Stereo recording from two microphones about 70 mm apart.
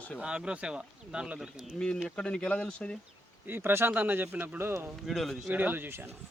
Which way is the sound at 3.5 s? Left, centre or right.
Right.